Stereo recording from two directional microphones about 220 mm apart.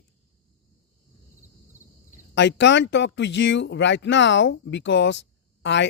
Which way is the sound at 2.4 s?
55° left (ahead or behind).